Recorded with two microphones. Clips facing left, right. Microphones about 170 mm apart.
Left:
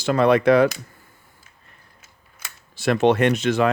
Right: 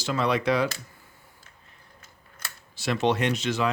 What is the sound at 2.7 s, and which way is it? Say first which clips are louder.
Speech: left 7 dB; 55° left (ahead or behind).